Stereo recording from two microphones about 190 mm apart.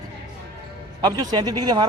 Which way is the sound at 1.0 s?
20° right (ahead or behind).